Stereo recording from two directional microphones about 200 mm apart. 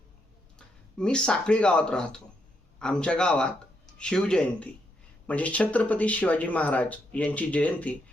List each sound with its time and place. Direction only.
0.9 s speech: 5° left (ahead or behind)